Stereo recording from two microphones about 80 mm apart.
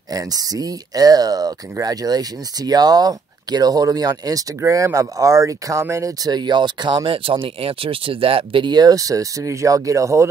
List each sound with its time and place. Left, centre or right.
0.1 s speech: right
4.6 s speech: right
6.3 s speech: right
8.1 s speech: right
8.5 s speech: right